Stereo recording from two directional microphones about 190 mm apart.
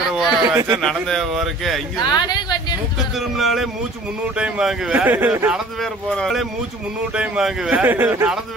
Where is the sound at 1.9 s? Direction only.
20° left (ahead or behind).